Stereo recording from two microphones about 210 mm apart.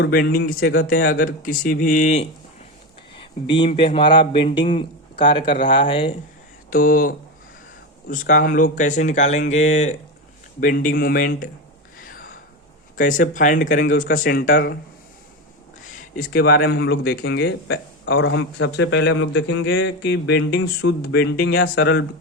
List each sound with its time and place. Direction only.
0.0 s speech: 45° left (ahead or behind)
3.5 s a man's voice: 25° left (ahead or behind)
6.7 s speech: 40° left (ahead or behind)
12.0 s a sound: 45° left (ahead or behind)
13.0 s speech: 40° left (ahead or behind)
16.1 s speech: 45° left (ahead or behind)